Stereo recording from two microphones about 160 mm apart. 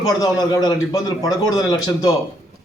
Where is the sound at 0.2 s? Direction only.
25° left (ahead or behind).